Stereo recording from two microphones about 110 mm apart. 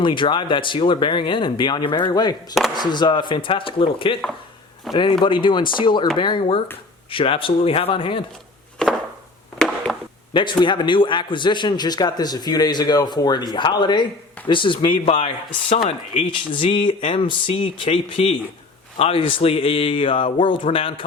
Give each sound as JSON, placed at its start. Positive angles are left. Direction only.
{"t": 0.0, "sound": "a man's voice", "side_deg": 45}
{"t": 4.9, "sound": "speech", "side_deg": 0}
{"t": 5.2, "sound": "a man's voice", "side_deg": 45}
{"t": 8.8, "sound": "a sound", "side_deg": 10}
{"t": 10.3, "sound": "a man's voice", "side_deg": 45}
{"t": 16.3, "sound": "speech", "side_deg": 50}